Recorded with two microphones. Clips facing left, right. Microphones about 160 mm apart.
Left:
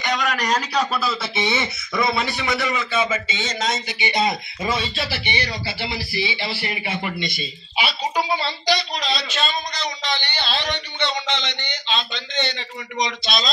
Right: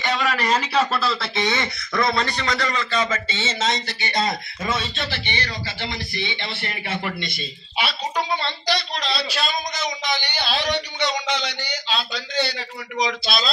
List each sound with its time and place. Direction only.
0.0 s speech: centre (ahead or behind)
3.8 s speech: 20° left (ahead or behind)
4.6 s speech: centre (ahead or behind)
10.2 s a man's voice: 10° right (ahead or behind)